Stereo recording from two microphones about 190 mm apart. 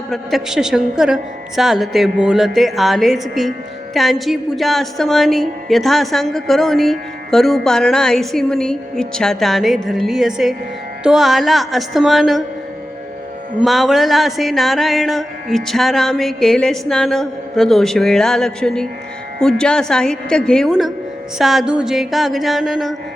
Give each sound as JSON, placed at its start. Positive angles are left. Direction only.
{"t": 0.1, "sound": "a woman's voice", "side_deg": 0}
{"t": 13.6, "sound": "a woman's voice", "side_deg": 0}